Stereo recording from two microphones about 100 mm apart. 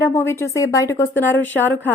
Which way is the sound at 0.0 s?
25° left (ahead or behind).